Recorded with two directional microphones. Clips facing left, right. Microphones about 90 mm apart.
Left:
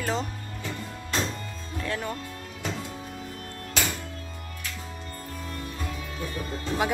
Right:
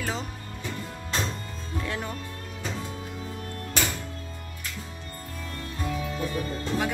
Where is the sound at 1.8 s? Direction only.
15° right (ahead or behind).